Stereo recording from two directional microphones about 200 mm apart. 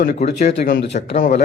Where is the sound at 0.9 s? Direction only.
40° left (ahead or behind).